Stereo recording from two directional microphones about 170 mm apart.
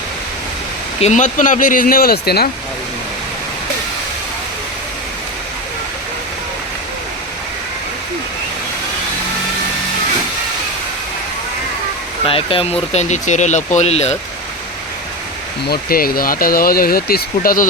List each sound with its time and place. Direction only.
1.0 s speech: 45° left (ahead or behind); by 2.5 s 65° left (ahead or behind)
12.2 s speech: 30° left (ahead or behind)
15.7 s speech: 60° left (ahead or behind)